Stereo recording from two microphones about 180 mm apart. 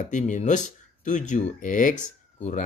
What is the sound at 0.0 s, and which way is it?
Speech, 45° left (ahead or behind).